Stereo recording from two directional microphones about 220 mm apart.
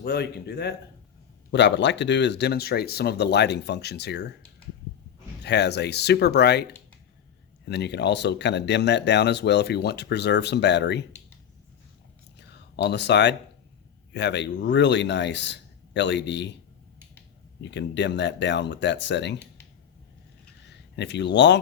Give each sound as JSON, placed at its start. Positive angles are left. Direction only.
{"t": 0.0, "sound": "speech", "side_deg": 45}
{"t": 5.4, "sound": "speech", "side_deg": 50}
{"t": 12.7, "sound": "speech", "side_deg": 50}
{"t": 17.6, "sound": "speech", "side_deg": 55}
{"t": 20.7, "sound": "speech", "side_deg": 50}